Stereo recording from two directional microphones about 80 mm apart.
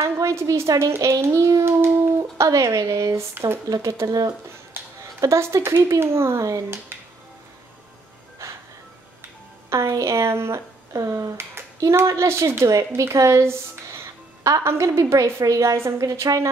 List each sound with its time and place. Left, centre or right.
0.0 s a child's voice: right
8.4 s music: right
9.7 s a child's voice: right